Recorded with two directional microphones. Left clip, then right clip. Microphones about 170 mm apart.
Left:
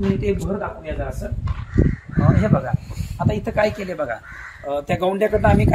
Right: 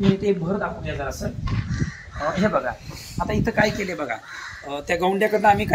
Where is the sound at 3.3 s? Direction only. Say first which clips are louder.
Left 1 dB; 55° left (ahead or behind).